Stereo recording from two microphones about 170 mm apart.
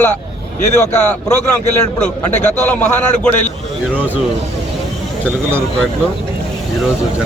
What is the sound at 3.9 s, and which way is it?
Speech, 10° right (ahead or behind).